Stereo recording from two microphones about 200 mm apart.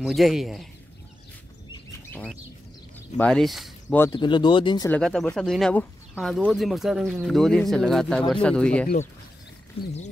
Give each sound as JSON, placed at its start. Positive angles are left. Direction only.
{"t": 0.0, "sound": "speech", "side_deg": 0}
{"t": 1.7, "sound": "a sound", "side_deg": 10}
{"t": 3.2, "sound": "speech", "side_deg": 5}
{"t": 4.0, "sound": "speech", "side_deg": 20}
{"t": 4.8, "sound": "speech", "side_deg": 5}
{"t": 9.8, "sound": "speech", "side_deg": 30}